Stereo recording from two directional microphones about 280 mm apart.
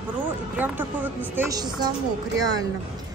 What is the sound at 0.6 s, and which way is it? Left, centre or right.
A woman's voice, centre.